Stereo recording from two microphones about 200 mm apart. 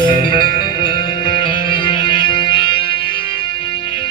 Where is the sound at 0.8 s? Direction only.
25° left (ahead or behind).